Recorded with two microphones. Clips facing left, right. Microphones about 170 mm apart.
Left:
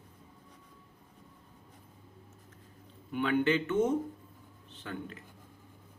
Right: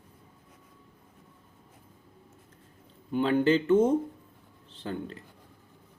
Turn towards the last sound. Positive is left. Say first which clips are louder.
# right 5 dB
turn(degrees=-30)  # may be behind; listen again after turning